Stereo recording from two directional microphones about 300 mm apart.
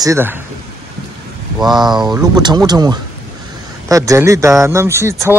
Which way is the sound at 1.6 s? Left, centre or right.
Centre.